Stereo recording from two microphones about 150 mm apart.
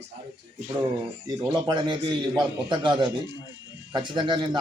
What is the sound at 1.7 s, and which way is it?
A man's voice, 30° right (ahead or behind).